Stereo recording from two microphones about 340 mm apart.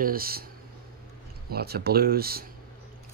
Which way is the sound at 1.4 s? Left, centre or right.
Right.